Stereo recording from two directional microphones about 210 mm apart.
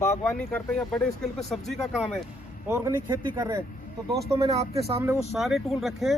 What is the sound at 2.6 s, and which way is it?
Speech, 10° right (ahead or behind).